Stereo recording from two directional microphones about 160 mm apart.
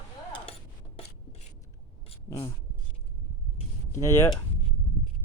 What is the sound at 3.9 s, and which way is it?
Speech, 15° left (ahead or behind).